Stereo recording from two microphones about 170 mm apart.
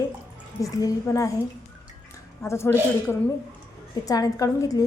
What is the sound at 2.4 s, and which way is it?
A woman's voice, 15° left (ahead or behind).